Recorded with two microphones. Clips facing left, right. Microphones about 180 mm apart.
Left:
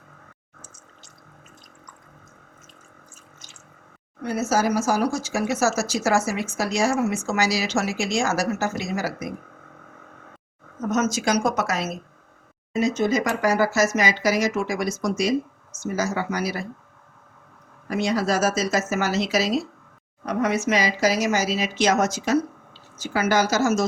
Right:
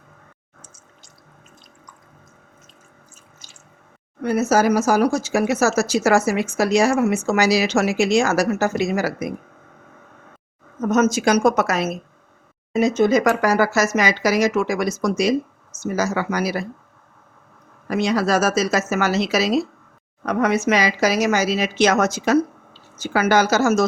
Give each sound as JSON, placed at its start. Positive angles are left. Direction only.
{"t": 4.2, "sound": "speech", "side_deg": -60}
{"t": 10.9, "sound": "speech", "side_deg": -55}
{"t": 17.8, "sound": "speech", "side_deg": -80}